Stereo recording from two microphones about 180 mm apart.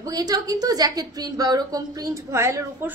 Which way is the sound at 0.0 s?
20° right (ahead or behind).